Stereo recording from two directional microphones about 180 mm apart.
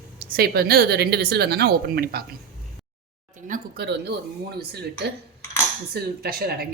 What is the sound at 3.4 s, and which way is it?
Speech, 45° right (ahead or behind).